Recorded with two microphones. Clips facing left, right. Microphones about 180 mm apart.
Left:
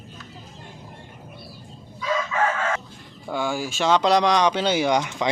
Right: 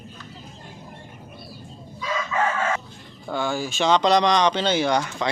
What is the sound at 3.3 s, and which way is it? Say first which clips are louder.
Speech: even; 10° left (ahead or behind).